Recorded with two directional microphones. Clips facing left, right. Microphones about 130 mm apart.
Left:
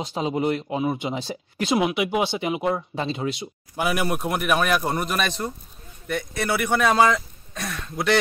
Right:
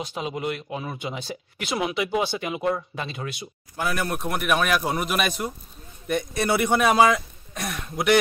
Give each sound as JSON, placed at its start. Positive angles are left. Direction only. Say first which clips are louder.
{"t": 0.0, "sound": "speech", "louder": "left 5 dB", "side_deg": 25}
{"t": 4.1, "sound": "speech", "louder": "left 1 dB", "side_deg": 0}
{"t": 6.0, "sound": "speech", "louder": "right 2 dB", "side_deg": -20}